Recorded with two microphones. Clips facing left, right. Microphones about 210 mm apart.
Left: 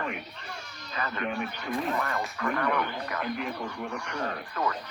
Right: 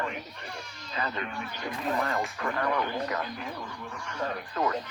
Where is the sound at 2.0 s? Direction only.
30° right (ahead or behind).